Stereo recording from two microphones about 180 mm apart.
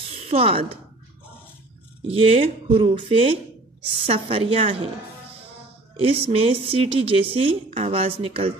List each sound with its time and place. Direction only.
0.2 s speech: 30° right (ahead or behind)
2.0 s speech: 30° right (ahead or behind)
5.9 s speech: 30° right (ahead or behind)